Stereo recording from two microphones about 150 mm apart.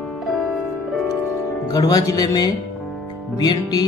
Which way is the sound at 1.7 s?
25° left (ahead or behind).